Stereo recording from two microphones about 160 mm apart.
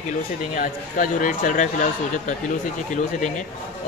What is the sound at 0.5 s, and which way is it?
A man's voice, 60° left (ahead or behind).